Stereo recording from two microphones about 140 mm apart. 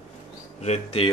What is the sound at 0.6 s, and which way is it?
Speech, 45° left (ahead or behind).